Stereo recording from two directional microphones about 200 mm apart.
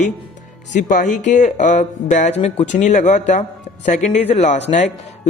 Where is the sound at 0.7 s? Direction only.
40° left (ahead or behind).